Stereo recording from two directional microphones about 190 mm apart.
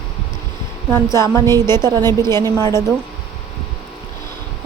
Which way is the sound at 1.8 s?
20° right (ahead or behind).